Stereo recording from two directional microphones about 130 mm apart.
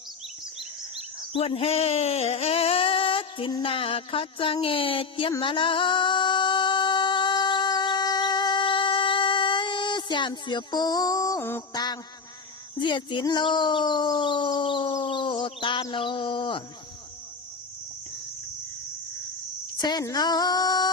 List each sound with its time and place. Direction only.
1.3 s speech: 45° left (ahead or behind)
3.6 s a sound: 45° left (ahead or behind)
5.4 s singing: 40° left (ahead or behind); by 11.6 s 20° left (ahead or behind)
11.7 s mantra: 30° left (ahead or behind)
12.8 s speech: 40° left (ahead or behind)
19.7 s speech: 30° left (ahead or behind)